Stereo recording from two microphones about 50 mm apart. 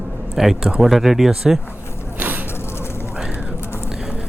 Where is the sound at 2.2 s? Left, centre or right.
Right.